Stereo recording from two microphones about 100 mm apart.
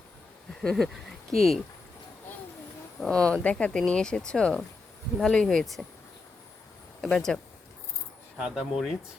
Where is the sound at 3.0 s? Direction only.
5° left (ahead or behind).